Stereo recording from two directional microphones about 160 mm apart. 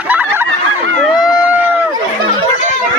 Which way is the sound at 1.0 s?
5° right (ahead or behind).